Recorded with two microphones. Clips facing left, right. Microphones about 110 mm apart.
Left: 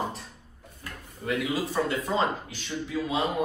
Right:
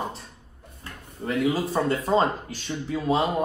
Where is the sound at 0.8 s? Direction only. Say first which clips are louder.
Right 1 dB; 30° right (ahead or behind).